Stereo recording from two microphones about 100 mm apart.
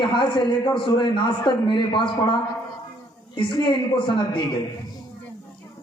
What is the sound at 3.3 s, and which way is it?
A man's voice, 55° left (ahead or behind).